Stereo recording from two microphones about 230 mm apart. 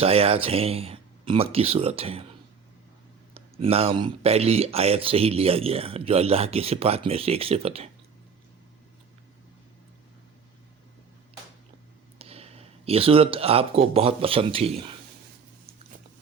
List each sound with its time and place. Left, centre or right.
0.0 s speech: right
3.3 s speech: right
12.2 s speech: right